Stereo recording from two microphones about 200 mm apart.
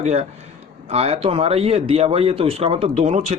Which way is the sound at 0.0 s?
35° right (ahead or behind).